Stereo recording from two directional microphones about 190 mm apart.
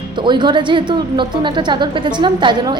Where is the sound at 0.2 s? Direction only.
25° right (ahead or behind).